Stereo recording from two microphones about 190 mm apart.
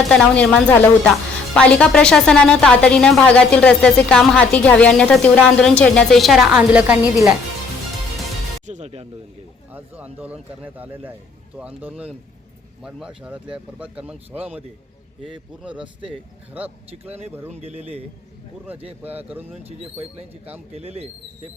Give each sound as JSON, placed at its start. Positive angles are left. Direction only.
{"t": 0.1, "sound": "speech", "side_deg": 5}
{"t": 8.6, "sound": "speech", "side_deg": -35}
{"t": 9.7, "sound": "speech", "side_deg": -10}
{"t": 15.8, "sound": "speech", "side_deg": -25}
{"t": 17.5, "sound": "speech", "side_deg": -35}
{"t": 19.0, "sound": "speech", "side_deg": -10}
{"t": 19.6, "sound": "speech", "side_deg": -30}